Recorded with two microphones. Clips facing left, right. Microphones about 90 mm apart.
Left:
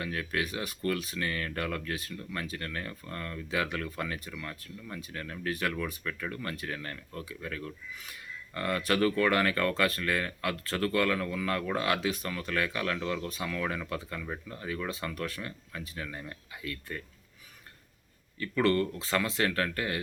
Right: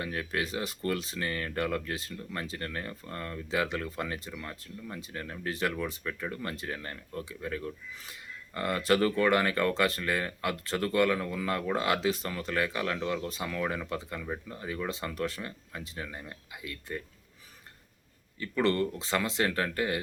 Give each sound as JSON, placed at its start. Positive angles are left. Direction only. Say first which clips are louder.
{"t": 0.0, "sound": "speech", "louder": "even", "side_deg": -30}
{"t": 18.3, "sound": "speech", "louder": "left 1 dB", "side_deg": -25}